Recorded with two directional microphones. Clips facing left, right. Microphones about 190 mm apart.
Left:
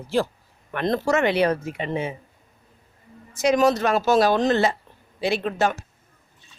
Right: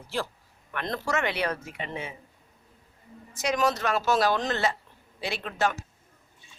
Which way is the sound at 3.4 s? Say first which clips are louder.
Left 7 dB; 25° left (ahead or behind).